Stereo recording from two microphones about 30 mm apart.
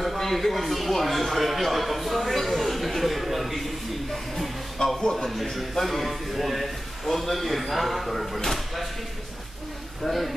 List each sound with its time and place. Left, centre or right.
0.0 s a man's voice: centre
4.8 s a man's voice: centre
5.1 s a man's voice: centre
10.0 s a man's voice: centre